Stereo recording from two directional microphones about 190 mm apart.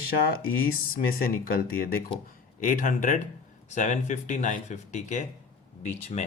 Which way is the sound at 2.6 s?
45° left (ahead or behind).